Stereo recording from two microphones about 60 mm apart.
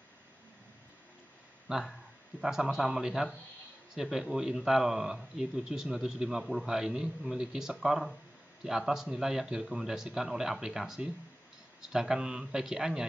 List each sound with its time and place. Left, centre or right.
1.7 s speech: centre